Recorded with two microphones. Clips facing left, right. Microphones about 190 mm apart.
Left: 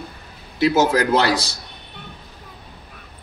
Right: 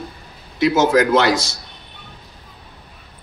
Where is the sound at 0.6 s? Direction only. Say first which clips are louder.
Right 2 dB; 35° left (ahead or behind).